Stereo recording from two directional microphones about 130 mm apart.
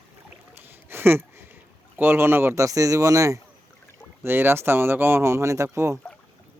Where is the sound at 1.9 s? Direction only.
15° right (ahead or behind).